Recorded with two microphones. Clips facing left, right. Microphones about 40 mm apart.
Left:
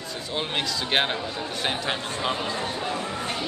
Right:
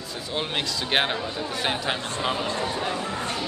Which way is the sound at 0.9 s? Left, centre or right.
Centre.